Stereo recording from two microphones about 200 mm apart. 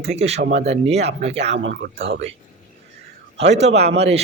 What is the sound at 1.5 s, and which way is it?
Speech, 70° right (ahead or behind).